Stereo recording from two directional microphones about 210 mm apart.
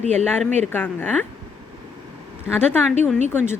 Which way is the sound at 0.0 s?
30° right (ahead or behind).